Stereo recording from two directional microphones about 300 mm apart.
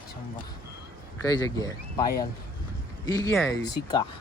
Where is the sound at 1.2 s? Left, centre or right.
Centre.